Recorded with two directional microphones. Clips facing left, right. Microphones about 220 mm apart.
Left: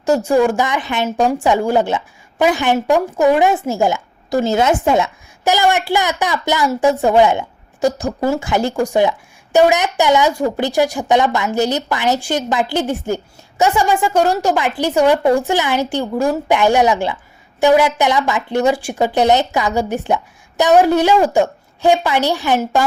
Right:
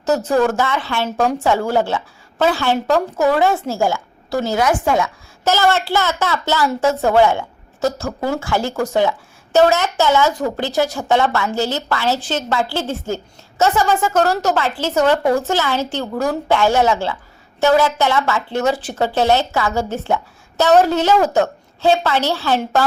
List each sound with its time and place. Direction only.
0.0 s speech: 10° left (ahead or behind)